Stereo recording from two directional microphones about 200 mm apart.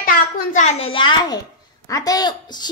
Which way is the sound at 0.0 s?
40° left (ahead or behind).